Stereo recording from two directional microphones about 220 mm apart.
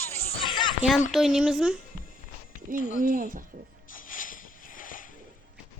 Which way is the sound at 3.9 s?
40° left (ahead or behind).